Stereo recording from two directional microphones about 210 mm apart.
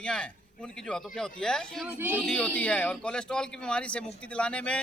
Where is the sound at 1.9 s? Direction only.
10° right (ahead or behind).